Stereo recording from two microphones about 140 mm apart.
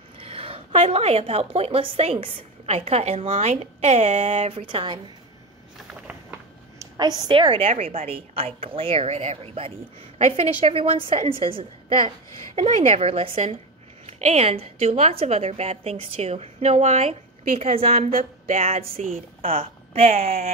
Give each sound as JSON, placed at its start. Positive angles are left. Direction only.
{"t": 0.2, "sound": "a woman's voice", "side_deg": -40}
{"t": 7.2, "sound": "a woman's voice", "side_deg": -35}